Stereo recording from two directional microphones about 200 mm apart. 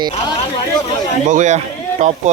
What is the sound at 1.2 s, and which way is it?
Speech, 40° right (ahead or behind).